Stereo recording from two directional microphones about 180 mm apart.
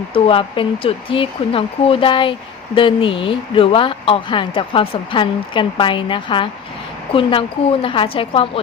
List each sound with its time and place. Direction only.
0.1 s speech: 30° left (ahead or behind)